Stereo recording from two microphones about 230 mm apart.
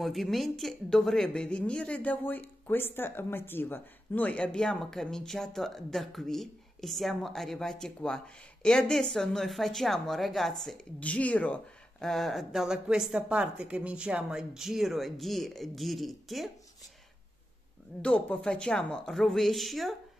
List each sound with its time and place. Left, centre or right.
0.0 s speech: centre
18.0 s speech: centre